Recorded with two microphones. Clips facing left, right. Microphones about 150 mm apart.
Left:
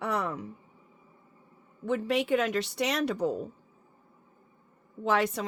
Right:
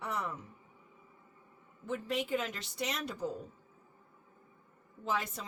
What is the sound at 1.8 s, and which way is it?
Speech, 75° left (ahead or behind).